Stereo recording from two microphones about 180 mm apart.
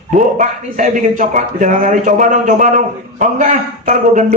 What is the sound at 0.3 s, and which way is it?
Speech, 45° right (ahead or behind).